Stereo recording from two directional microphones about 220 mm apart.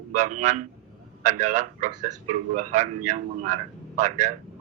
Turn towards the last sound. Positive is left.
turn(degrees=-35)  # may be behind; listen again after turning